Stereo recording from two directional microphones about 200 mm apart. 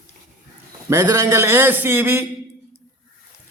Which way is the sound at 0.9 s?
15° right (ahead or behind).